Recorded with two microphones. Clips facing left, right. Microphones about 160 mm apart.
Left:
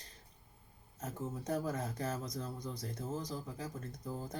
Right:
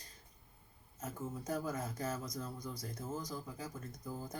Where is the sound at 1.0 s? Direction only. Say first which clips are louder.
Left 2 dB; 30° left (ahead or behind).